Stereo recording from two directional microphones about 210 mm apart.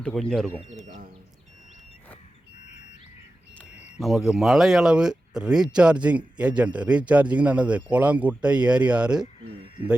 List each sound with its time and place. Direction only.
0.0 s speech: 5° left (ahead or behind)
0.6 s speech: 30° right (ahead or behind)
3.9 s speech: centre (ahead or behind)